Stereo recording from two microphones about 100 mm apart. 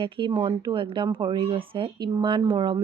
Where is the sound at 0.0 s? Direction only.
55° right (ahead or behind).